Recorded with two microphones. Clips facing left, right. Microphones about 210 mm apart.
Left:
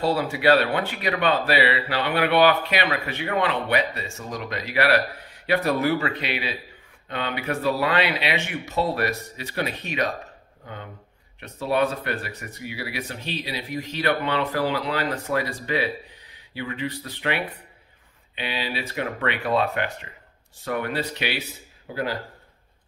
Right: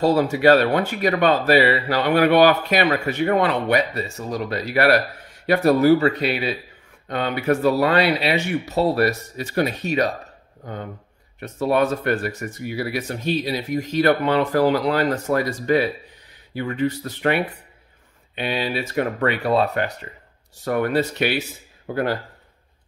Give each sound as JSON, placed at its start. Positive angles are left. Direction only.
{"t": 0.0, "sound": "speech", "side_deg": -45}